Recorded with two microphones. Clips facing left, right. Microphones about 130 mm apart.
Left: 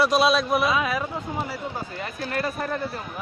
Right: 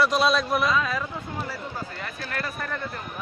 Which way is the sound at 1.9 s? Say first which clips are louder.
Left 4 dB; 20° left (ahead or behind).